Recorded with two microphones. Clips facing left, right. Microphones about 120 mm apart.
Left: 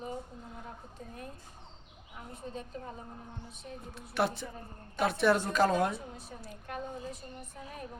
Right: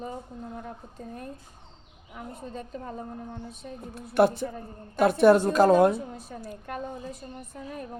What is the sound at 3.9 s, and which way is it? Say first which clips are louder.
A man's voice: right 10 dB; 50° right (ahead or behind).